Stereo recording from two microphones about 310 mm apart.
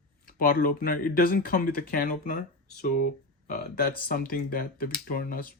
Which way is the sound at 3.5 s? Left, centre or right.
Left.